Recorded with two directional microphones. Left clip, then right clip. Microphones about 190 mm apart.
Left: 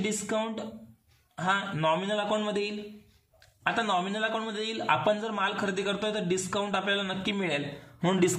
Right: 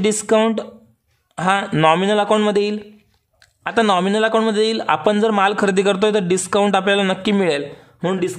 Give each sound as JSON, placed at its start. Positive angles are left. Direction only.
{"t": 0.0, "sound": "a man's voice", "side_deg": -50}